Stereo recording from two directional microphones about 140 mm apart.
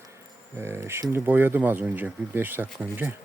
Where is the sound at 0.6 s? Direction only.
20° right (ahead or behind).